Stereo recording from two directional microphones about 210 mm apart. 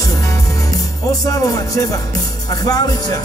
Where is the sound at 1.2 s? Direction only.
15° left (ahead or behind).